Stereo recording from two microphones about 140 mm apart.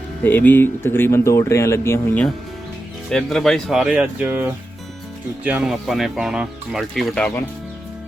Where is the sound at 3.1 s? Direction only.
5° left (ahead or behind).